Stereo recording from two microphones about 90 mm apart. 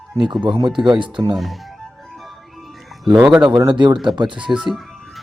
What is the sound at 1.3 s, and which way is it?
Speech, centre (ahead or behind).